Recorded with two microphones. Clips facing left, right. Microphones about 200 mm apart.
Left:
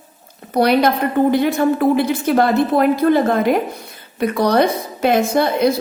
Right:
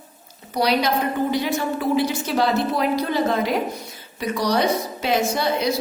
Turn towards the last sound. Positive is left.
turn(degrees=55)  # may be behind; listen again after turning